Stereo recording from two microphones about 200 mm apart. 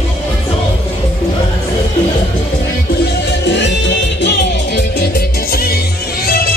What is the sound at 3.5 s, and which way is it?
Music, 60° left (ahead or behind).